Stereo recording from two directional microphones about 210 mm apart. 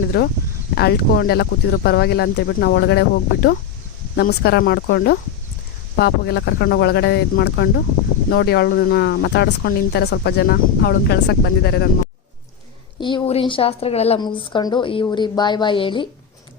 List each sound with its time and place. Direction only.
0.1 s speech: 50° left (ahead or behind)
13.0 s a woman's voice: 25° left (ahead or behind)